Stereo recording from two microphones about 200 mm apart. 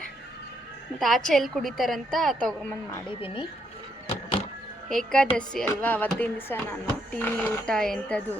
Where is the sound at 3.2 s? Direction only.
25° left (ahead or behind).